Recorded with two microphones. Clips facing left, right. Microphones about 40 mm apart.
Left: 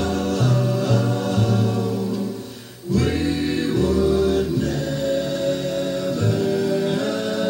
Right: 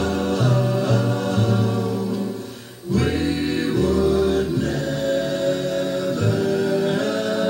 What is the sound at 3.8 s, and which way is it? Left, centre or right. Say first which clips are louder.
Music: even; right.